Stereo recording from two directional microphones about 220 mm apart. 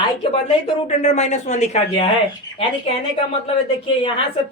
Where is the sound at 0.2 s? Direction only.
25° left (ahead or behind).